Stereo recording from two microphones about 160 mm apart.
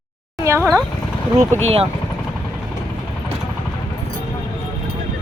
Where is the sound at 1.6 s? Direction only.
40° right (ahead or behind).